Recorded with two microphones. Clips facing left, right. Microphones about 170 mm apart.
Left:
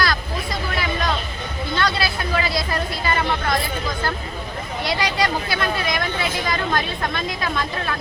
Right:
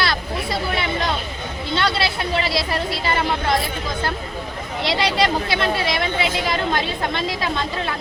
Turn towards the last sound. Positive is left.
turn(degrees=-25)  # may be behind; listen again after turning